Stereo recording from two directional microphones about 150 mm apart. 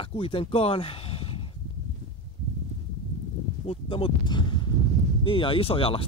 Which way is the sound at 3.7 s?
35° left (ahead or behind).